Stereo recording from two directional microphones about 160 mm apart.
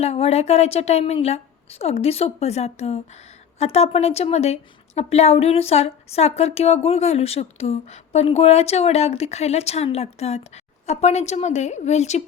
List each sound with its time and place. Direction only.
0.0 s a woman's voice: 40° left (ahead or behind)